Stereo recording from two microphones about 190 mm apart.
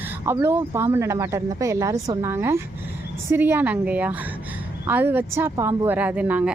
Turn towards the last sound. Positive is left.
turn(degrees=-5)  # may be behind; listen again after turning